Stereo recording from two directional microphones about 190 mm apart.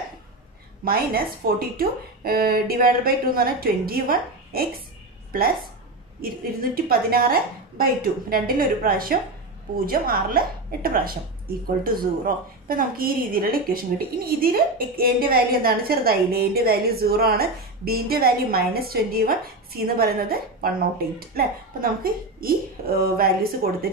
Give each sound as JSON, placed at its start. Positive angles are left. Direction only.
{"t": 0.8, "sound": "a woman's voice", "side_deg": -50}
{"t": 6.2, "sound": "a woman's voice", "side_deg": -50}